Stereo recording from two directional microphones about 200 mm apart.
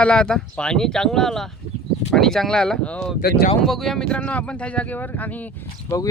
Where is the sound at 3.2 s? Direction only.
50° left (ahead or behind).